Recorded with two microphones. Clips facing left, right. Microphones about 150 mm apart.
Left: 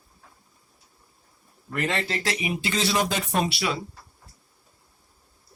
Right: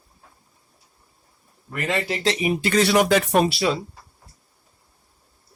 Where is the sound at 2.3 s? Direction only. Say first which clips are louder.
Right 6 dB; 40° right (ahead or behind).